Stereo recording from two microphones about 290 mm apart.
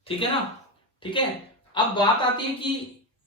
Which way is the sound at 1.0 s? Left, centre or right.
Centre.